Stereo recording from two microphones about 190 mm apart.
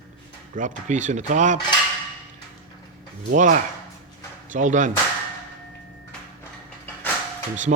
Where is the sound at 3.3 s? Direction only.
40° right (ahead or behind).